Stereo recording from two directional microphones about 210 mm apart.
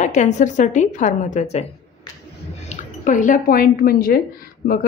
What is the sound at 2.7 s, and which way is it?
Speech, 35° left (ahead or behind).